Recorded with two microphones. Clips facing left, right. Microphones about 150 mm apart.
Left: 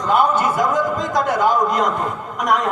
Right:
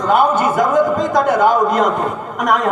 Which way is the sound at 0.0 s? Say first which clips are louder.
Right 3 dB; 50° right (ahead or behind).